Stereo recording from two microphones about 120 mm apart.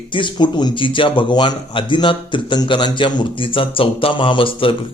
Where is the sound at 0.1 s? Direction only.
40° left (ahead or behind).